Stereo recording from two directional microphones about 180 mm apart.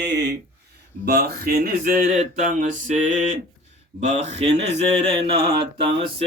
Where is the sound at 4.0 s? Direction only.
40° right (ahead or behind).